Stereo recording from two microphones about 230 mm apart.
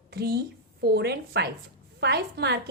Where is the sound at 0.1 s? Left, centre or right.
Right.